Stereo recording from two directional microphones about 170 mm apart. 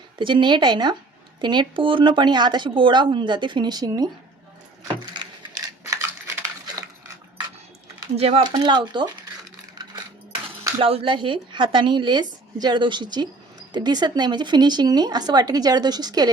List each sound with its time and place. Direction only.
0.2 s speech: 30° right (ahead or behind)
8.1 s speech: 35° right (ahead or behind)
10.8 s speech: 35° right (ahead or behind)